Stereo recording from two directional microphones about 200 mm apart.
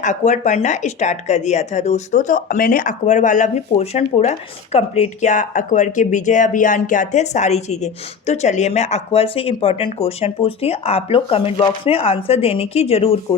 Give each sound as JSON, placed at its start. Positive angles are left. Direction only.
{"t": 0.0, "sound": "speech", "side_deg": 40}